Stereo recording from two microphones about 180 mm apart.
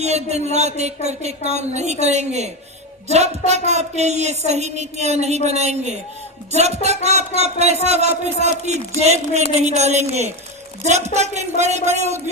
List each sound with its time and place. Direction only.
0.0 s a woman's voice: 35° right (ahead or behind)